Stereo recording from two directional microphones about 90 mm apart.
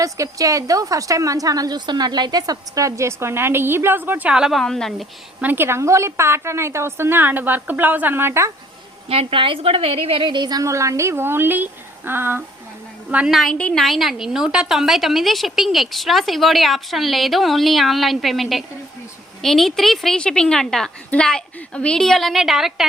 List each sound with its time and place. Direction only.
0.0 s a woman's voice: 40° right (ahead or behind); by 4.3 s 20° right (ahead or behind)
4.3 s a woman's voice: 5° right (ahead or behind)
4.6 s a woman's voice: 5° left (ahead or behind)
5.4 s a woman's voice: 25° right (ahead or behind)
9.0 s a woman's voice: 80° right; by 10.6 s 55° right (ahead or behind)
10.6 s a woman's voice: 35° right (ahead or behind); by 13.3 s 15° right (ahead or behind)
13.3 s a woman's voice: centre (ahead or behind)
13.6 s a woman's voice: 10° left (ahead or behind)
13.8 s a woman's voice: centre (ahead or behind)